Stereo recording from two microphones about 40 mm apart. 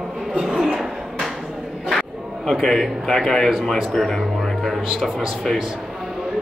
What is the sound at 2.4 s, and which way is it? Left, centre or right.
A man's voice, centre.